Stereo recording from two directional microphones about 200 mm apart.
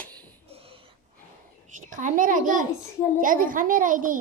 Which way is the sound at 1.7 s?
40° right (ahead or behind).